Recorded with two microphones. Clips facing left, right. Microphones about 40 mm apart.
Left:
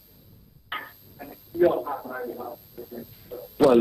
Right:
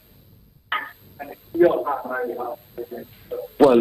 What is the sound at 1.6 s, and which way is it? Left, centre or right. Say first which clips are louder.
A man's voice: right 4 dB; right.